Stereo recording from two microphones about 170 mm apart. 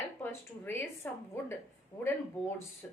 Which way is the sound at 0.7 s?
15° left (ahead or behind).